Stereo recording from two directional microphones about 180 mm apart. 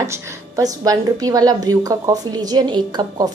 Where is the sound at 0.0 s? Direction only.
15° right (ahead or behind).